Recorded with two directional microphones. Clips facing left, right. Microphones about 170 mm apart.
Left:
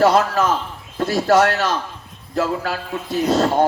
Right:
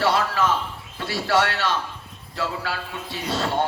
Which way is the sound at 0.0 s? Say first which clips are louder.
Left 6 dB; 45° left (ahead or behind).